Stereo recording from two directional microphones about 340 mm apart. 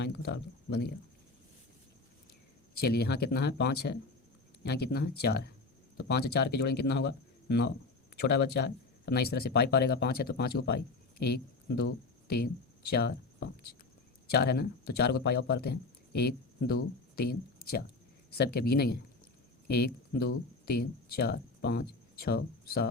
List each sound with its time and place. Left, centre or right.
0.0 s speech: left
2.7 s speech: left